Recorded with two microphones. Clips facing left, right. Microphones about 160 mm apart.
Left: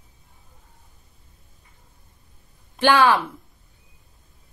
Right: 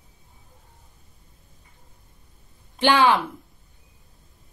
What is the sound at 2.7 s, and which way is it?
Speech, 20° right (ahead or behind).